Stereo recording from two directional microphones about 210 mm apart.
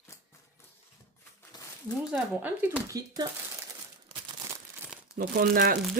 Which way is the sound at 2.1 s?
10° right (ahead or behind).